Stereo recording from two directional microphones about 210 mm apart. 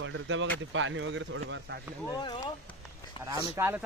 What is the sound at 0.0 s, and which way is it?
Speech, 65° right (ahead or behind).